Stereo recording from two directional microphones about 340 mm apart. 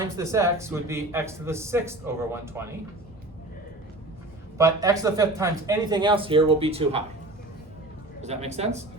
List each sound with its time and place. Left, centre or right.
0.2 s a man's voice: centre
4.5 s a man's voice: centre
8.2 s a man's voice: centre